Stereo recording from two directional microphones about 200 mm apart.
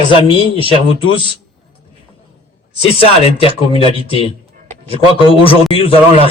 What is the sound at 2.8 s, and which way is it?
Speech, 30° left (ahead or behind).